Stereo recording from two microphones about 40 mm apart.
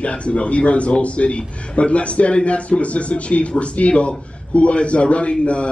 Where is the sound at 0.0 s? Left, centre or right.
Left.